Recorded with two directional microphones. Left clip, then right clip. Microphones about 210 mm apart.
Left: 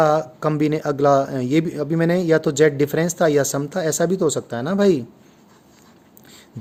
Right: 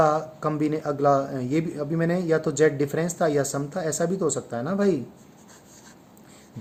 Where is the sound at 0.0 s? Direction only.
45° left (ahead or behind).